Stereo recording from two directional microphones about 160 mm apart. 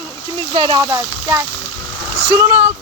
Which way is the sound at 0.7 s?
20° right (ahead or behind).